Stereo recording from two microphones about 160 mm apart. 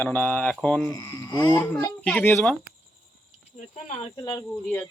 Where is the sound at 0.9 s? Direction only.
25° left (ahead or behind).